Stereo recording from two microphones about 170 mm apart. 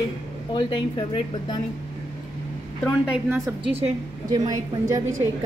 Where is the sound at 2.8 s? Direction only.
5° right (ahead or behind).